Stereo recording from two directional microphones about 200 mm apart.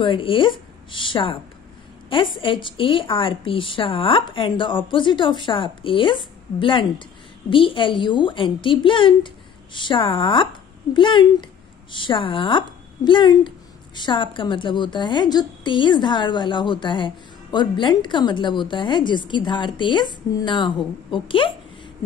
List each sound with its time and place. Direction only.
0.0 s a woman's voice: 25° left (ahead or behind)
2.4 s a woman's voice: 25° left (ahead or behind)